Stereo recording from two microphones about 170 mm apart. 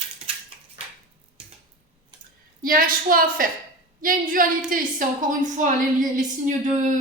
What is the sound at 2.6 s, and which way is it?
A woman's voice, 55° right (ahead or behind).